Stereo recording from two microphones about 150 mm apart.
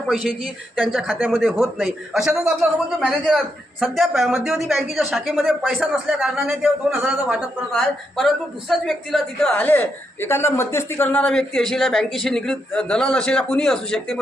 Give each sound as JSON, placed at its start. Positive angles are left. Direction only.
{"t": 0.1, "sound": "a woman's voice", "side_deg": 0}